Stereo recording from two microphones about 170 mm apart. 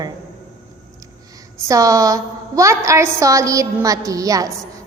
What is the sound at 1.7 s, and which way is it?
A woman's voice, 20° right (ahead or behind).